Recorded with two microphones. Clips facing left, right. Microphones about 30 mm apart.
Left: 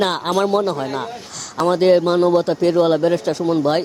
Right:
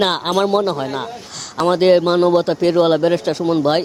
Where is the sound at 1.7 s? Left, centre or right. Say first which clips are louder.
Right 1 dB; right.